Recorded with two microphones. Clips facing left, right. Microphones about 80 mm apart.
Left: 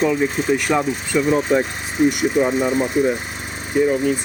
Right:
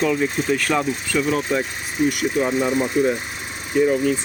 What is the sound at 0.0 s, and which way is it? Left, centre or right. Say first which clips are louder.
Speech: left 2 dB; centre.